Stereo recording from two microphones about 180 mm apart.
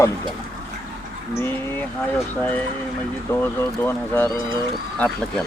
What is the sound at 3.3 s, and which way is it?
Speech, 10° left (ahead or behind).